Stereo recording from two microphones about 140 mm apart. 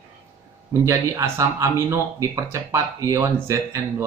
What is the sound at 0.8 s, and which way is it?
Speech, 20° right (ahead or behind).